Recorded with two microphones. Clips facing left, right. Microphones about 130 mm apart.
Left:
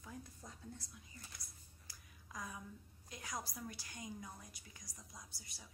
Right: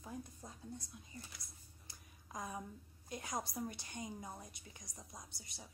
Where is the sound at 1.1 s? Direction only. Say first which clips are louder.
Right 7 dB; 25° right (ahead or behind).